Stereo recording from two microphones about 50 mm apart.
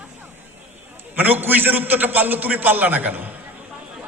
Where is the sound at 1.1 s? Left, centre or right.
Right.